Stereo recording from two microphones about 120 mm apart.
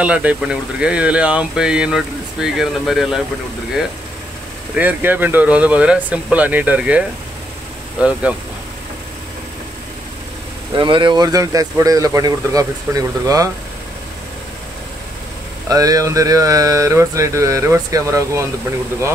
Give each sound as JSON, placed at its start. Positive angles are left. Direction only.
{"t": 0.0, "sound": "speech", "side_deg": -10}
{"t": 4.7, "sound": "speech", "side_deg": -15}
{"t": 10.8, "sound": "speech", "side_deg": -40}
{"t": 15.7, "sound": "speech", "side_deg": -30}